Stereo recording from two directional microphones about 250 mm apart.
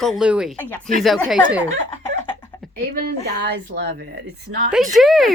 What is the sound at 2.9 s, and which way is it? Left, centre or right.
A woman's voice, right.